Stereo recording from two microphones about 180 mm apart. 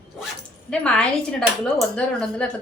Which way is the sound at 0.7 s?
5° left (ahead or behind).